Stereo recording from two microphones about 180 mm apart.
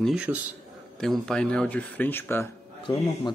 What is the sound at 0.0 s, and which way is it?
Speech, 5° right (ahead or behind).